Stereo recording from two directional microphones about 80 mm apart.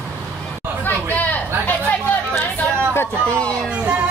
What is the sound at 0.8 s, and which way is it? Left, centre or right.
Chatter, left.